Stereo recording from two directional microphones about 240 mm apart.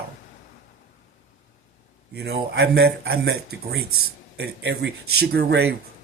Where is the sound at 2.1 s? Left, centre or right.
Right.